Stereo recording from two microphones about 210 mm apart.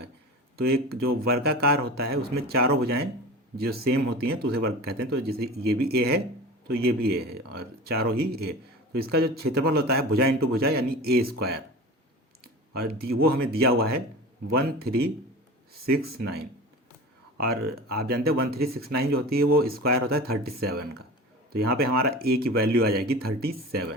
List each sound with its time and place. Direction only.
0.5 s speech: 45° right (ahead or behind)
4.2 s speech: 50° right (ahead or behind)
12.7 s speech: 50° right (ahead or behind)